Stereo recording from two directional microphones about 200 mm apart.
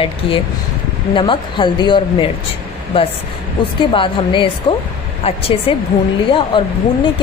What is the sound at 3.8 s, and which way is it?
A woman's voice, 25° left (ahead or behind).